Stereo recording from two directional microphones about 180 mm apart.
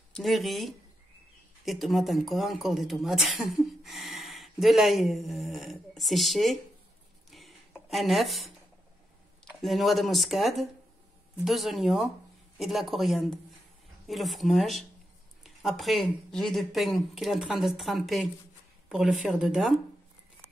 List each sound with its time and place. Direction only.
0.1 s speech: centre (ahead or behind)
7.2 s a sound: centre (ahead or behind)
9.4 s speech: centre (ahead or behind)